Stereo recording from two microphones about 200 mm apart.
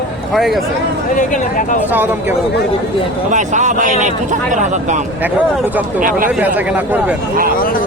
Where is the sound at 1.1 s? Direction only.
40° left (ahead or behind).